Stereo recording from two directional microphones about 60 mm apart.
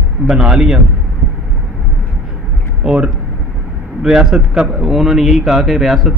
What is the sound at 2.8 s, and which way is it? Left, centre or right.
A man's voice, centre.